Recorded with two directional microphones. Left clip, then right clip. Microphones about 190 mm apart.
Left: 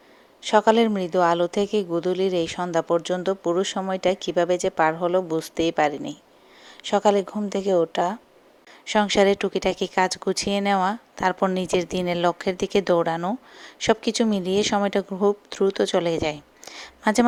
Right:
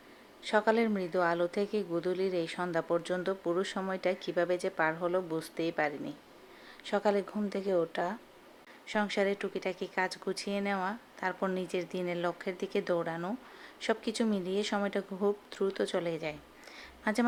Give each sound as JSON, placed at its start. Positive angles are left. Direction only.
{"t": 0.4, "sound": "speech", "side_deg": 35}